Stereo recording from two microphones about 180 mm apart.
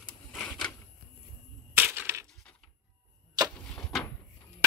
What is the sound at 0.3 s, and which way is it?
Printer, 5° left (ahead or behind).